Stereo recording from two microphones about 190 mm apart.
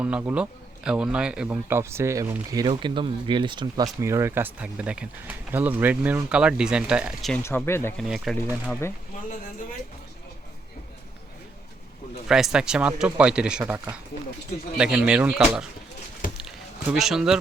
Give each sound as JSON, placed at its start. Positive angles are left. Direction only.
{"t": 0.0, "sound": "speech", "side_deg": -10}
{"t": 4.0, "sound": "speech", "side_deg": -15}
{"t": 7.4, "sound": "speech", "side_deg": 10}
{"t": 8.0, "sound": "speech", "side_deg": 0}
{"t": 8.6, "sound": "speech", "side_deg": 10}
{"t": 12.3, "sound": "speech", "side_deg": -5}
{"t": 16.2, "sound": "a sound", "side_deg": 45}
{"t": 16.9, "sound": "speech", "side_deg": 0}